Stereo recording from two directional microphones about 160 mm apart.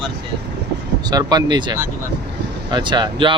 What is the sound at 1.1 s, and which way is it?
Speech, 25° right (ahead or behind).